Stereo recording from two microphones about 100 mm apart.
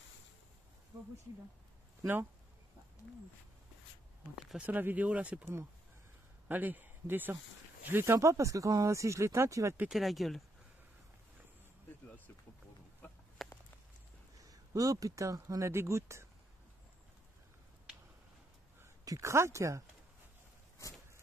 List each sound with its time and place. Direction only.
4.6 s speech: 15° right (ahead or behind)
6.5 s speech: 20° right (ahead or behind)
9.8 s speech: centre (ahead or behind)
13.4 s a sound: centre (ahead or behind)
14.4 s speech: 35° right (ahead or behind)
19.0 s speech: 30° right (ahead or behind)